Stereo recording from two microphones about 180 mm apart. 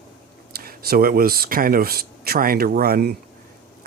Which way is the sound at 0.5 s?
60° right (ahead or behind).